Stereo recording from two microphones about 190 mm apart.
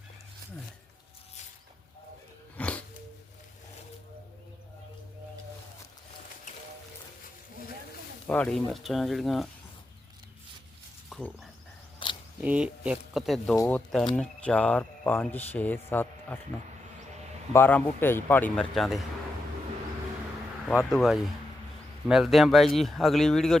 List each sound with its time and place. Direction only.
2.6 s a sound: 5° left (ahead or behind)
8.3 s speech: 5° left (ahead or behind)
11.1 s a sound: centre (ahead or behind)
12.0 s camera: 25° left (ahead or behind)
12.5 s speech: 5° right (ahead or behind); by 16.4 s 10° left (ahead or behind)
17.5 s speech: 10° left (ahead or behind)
20.9 s speech: centre (ahead or behind)